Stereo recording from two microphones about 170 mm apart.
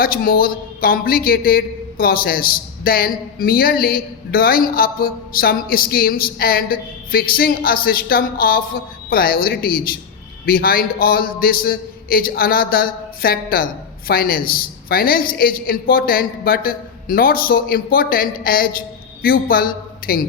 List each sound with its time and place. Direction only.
0.0 s a man's voice: 60° left (ahead or behind)